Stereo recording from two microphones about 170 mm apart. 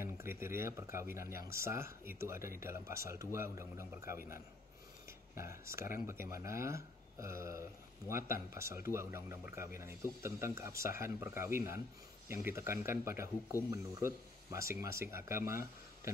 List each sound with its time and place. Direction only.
0.0 s speech: 15° right (ahead or behind)
5.0 s a sound: 15° right (ahead or behind)
5.9 s speech: 15° right (ahead or behind)